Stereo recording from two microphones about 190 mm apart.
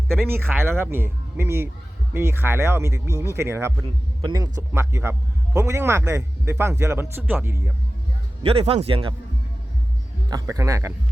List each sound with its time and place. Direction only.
0.3 s speech: 10° right (ahead or behind)
8.4 s a man's voice: 30° right (ahead or behind)
10.2 s speech: 20° right (ahead or behind)